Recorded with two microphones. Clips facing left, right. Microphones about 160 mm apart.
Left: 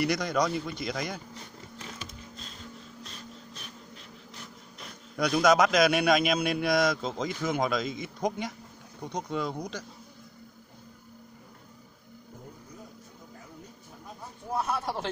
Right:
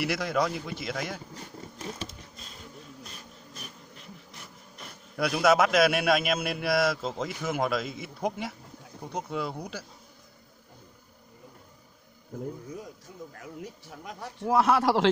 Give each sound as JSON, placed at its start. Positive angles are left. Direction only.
{"t": 0.0, "sound": "speech", "side_deg": -5}
{"t": 3.0, "sound": "a sound", "side_deg": -5}
{"t": 4.4, "sound": "speech", "side_deg": -5}
{"t": 13.4, "sound": "a man's voice", "side_deg": -90}